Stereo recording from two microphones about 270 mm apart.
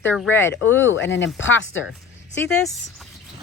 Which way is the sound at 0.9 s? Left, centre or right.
Left.